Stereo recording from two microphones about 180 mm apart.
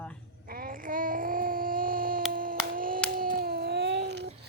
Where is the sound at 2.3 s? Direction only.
50° right (ahead or behind); by 4.3 s 75° right (ahead or behind).